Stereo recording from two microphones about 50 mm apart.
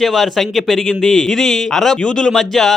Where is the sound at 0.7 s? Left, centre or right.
Centre.